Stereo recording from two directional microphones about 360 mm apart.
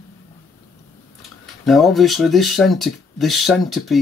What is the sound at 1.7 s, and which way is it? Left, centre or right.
Speech, centre.